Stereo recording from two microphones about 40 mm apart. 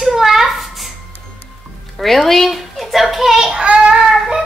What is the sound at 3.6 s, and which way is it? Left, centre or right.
Child singing, right.